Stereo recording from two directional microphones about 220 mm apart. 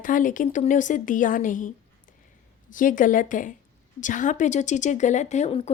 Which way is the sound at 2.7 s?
35° left (ahead or behind).